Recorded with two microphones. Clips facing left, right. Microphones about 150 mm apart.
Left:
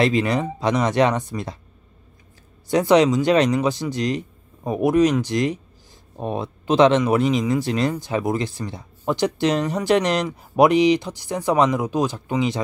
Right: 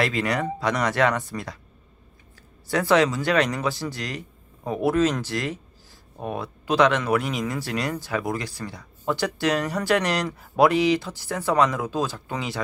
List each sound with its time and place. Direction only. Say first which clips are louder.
0.0 s speech: left 5 dB; 20° left (ahead or behind)
2.7 s speech: left 4 dB; 20° left (ahead or behind)